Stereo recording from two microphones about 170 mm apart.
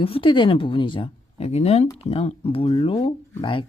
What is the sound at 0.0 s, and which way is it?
Speech, 30° left (ahead or behind).